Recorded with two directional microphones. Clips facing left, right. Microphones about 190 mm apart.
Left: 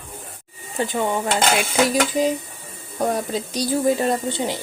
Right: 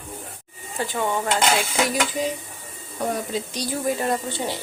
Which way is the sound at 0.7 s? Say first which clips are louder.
Left 3 dB; 20° left (ahead or behind).